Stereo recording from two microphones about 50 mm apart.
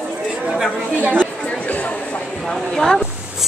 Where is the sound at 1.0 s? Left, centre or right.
Right.